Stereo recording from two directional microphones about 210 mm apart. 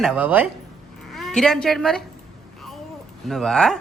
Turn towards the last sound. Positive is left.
turn(degrees=0)  # may be behind; listen again after turning